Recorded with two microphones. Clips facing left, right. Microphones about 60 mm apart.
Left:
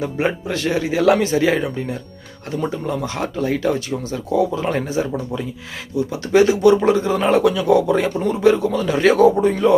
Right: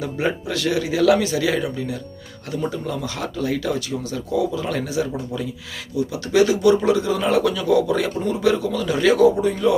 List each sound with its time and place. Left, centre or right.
0.0 s speech: left